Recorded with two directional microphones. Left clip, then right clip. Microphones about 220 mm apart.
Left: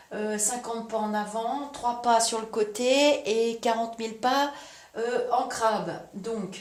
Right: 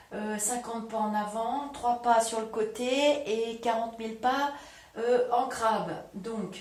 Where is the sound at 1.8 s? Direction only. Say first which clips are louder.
Left 1 dB; 45° left (ahead or behind).